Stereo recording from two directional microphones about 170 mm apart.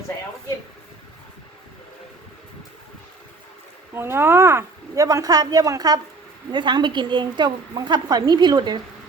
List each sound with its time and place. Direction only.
3.9 s a woman's voice: 15° right (ahead or behind)